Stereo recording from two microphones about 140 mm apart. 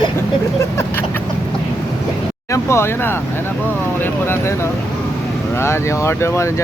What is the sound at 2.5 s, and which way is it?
Speech, 20° left (ahead or behind).